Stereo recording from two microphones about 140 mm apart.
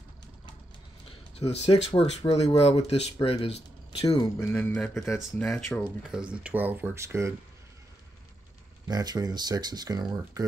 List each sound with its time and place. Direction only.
1.0 s speech: 50° left (ahead or behind)
4.4 s speech: 15° left (ahead or behind)
5.4 s speech: centre (ahead or behind); by 7.3 s 20° right (ahead or behind)
8.8 s speech: 30° right (ahead or behind)